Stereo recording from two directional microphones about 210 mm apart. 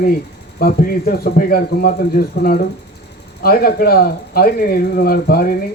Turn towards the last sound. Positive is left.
turn(degrees=45)  # may be behind; listen again after turning